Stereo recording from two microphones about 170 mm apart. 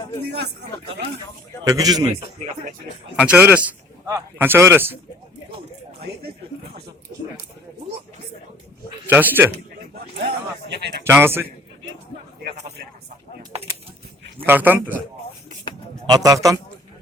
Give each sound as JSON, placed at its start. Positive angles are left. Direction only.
{"t": 0.3, "sound": "speech", "side_deg": -80}
{"t": 1.6, "sound": "a man's voice", "side_deg": -20}
{"t": 3.2, "sound": "a man's voice", "side_deg": -10}
{"t": 9.0, "sound": "a man's voice", "side_deg": -10}
{"t": 10.7, "sound": "speech", "side_deg": -80}
{"t": 11.0, "sound": "a man's voice", "side_deg": -15}
{"t": 14.4, "sound": "a man's voice", "side_deg": -10}
{"t": 16.0, "sound": "a man's voice", "side_deg": -20}